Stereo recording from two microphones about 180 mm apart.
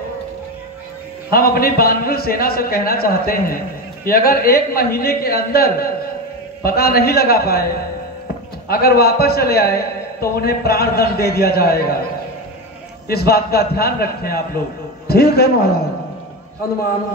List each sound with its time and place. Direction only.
1.3 s a man's voice: 55° left (ahead or behind)
8.6 s a man's voice: 60° left (ahead or behind)
13.1 s a man's voice: 60° left (ahead or behind)